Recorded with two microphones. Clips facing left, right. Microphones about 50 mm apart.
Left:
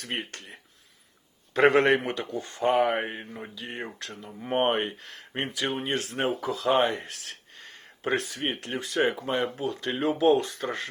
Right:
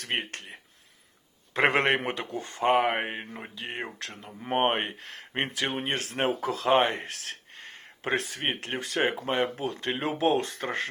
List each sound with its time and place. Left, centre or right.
0.0 s speech: right
0.3 s speech: right
1.5 s speech: right